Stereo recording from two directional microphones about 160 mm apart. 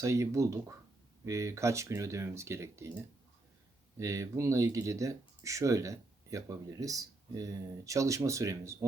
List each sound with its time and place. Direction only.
0.0 s speech: 20° right (ahead or behind)
3.9 s speech: 20° right (ahead or behind)